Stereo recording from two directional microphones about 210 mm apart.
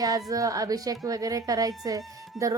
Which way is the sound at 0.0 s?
15° right (ahead or behind).